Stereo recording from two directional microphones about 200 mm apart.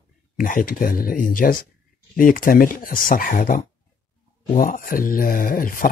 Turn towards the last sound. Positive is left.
turn(degrees=45)  # may be behind; listen again after turning